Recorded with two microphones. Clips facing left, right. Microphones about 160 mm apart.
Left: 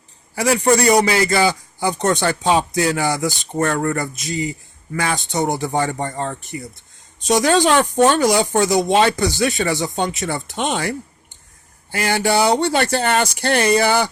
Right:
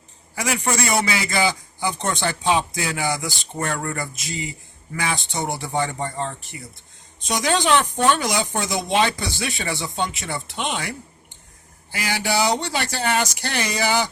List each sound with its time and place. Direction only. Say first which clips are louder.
0.3 s a man's voice: left 8 dB; 35° left (ahead or behind); by 14.1 s 55° left (ahead or behind)